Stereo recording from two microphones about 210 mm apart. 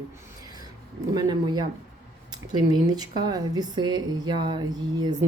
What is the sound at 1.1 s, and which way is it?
A woman's voice, 20° right (ahead or behind).